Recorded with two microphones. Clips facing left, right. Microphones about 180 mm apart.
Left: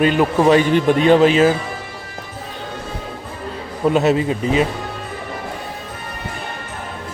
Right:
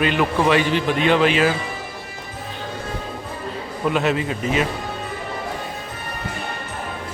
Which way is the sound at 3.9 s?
35° left (ahead or behind).